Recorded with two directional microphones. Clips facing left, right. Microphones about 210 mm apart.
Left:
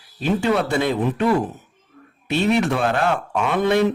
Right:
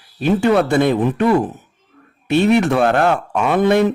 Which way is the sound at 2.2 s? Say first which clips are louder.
Right 5 dB; 55° right (ahead or behind).